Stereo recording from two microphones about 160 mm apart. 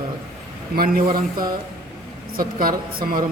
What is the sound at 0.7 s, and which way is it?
Speech, 65° right (ahead or behind).